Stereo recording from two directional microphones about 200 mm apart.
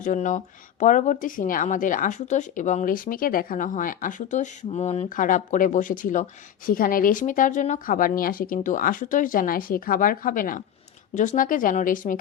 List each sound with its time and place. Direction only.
0.0 s speech: 40° left (ahead or behind)